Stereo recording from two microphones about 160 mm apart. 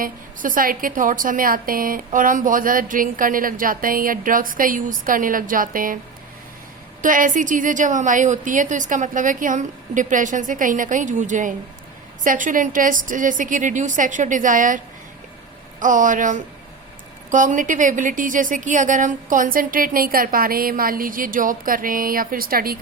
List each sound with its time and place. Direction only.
0.0 s a woman's voice: 60° right (ahead or behind)
7.0 s a woman's voice: 55° right (ahead or behind)
15.8 s a woman's voice: 55° right (ahead or behind)